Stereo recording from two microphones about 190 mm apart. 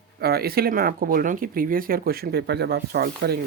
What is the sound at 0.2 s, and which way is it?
Speech, 55° right (ahead or behind).